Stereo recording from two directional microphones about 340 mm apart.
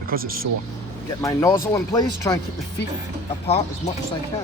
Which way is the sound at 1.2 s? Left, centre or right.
Centre.